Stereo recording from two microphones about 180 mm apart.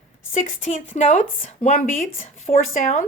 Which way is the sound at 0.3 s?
40° left (ahead or behind).